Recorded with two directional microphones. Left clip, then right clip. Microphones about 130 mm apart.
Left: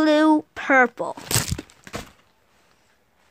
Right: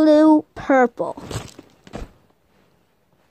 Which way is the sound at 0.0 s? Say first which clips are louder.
Right 4 dB; 35° right (ahead or behind).